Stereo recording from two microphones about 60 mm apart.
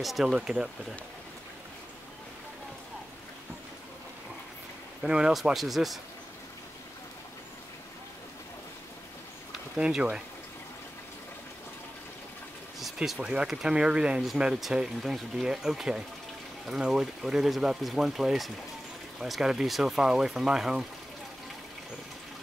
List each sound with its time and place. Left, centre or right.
0.0 s speech: centre
5.0 s speech: centre
9.8 s speech: centre
12.8 s a sound: centre
13.2 s speech: centre